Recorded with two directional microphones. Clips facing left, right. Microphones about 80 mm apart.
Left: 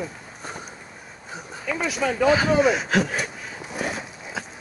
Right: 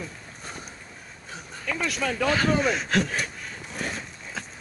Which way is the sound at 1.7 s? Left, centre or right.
Centre.